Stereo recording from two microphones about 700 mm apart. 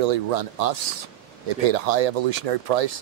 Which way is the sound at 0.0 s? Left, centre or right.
Right.